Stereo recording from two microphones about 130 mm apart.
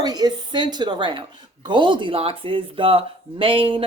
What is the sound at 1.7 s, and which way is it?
Speech, 40° right (ahead or behind).